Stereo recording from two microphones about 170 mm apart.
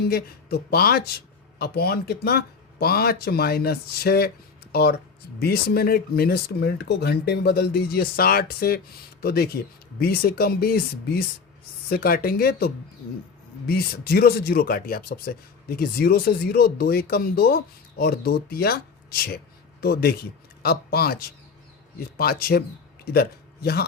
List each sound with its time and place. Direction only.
0.1 s a man's voice: 65° left (ahead or behind)